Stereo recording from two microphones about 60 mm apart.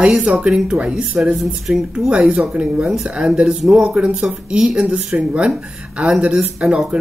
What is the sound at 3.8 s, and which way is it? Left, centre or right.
Speech, right.